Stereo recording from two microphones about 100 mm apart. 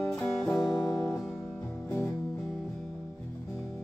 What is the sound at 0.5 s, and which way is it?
Music, 35° left (ahead or behind).